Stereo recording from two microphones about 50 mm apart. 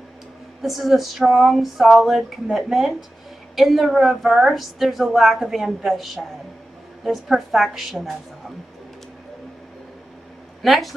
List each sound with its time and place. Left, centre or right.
0.6 s a woman's voice: centre
10.6 s a woman's voice: centre